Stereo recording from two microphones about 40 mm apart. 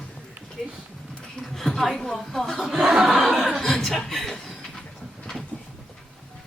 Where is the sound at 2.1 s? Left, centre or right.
Centre.